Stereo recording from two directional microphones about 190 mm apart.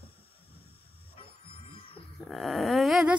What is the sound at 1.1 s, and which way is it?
Music, 30° left (ahead or behind).